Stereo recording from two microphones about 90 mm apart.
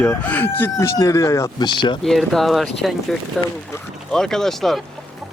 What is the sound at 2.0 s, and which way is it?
Speech, 5° left (ahead or behind).